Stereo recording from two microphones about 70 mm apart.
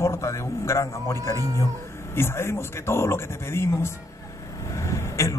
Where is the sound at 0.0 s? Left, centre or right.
Left.